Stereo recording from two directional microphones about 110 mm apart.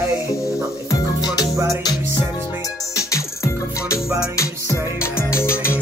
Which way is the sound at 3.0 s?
30° left (ahead or behind).